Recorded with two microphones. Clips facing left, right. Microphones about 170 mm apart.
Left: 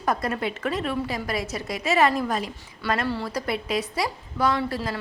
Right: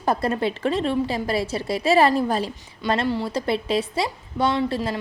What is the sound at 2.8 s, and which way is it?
A woman's voice, 20° right (ahead or behind).